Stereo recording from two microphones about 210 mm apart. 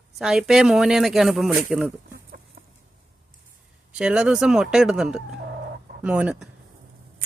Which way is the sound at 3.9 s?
5° right (ahead or behind).